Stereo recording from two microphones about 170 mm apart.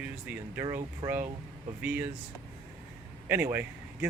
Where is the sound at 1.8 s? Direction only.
10° right (ahead or behind).